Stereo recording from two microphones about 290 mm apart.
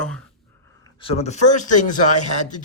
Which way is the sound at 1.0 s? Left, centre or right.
Left.